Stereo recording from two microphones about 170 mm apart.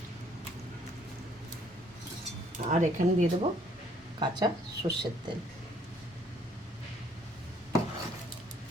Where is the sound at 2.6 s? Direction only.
45° right (ahead or behind).